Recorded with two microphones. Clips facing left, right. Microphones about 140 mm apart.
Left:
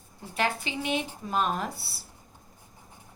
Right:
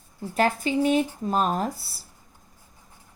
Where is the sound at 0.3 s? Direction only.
40° right (ahead or behind).